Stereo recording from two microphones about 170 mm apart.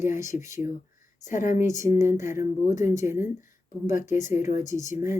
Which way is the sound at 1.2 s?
50° left (ahead or behind).